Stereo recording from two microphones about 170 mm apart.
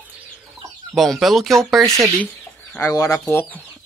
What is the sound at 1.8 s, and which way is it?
Speech, 20° right (ahead or behind).